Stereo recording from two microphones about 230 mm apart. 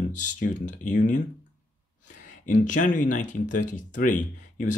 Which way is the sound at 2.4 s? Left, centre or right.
Left.